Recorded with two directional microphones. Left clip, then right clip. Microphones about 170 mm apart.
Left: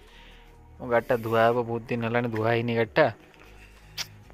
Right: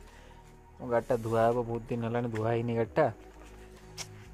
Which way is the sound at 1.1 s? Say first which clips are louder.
Left 4 dB; centre (ahead or behind).